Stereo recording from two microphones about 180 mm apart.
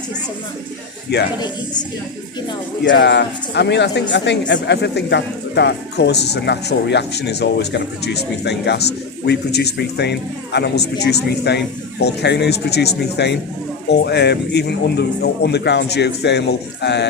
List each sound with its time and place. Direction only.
1.1 s speech: 65° left (ahead or behind)
2.9 s speech: 70° left (ahead or behind)